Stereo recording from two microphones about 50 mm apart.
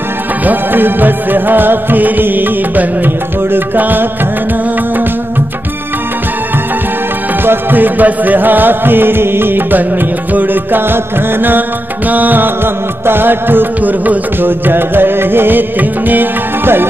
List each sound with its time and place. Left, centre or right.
0.5 s music: right
7.4 s music: right
12.1 s music: right
13.0 s music: right